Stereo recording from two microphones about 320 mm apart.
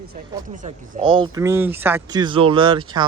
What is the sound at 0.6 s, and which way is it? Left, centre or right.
Speech, right.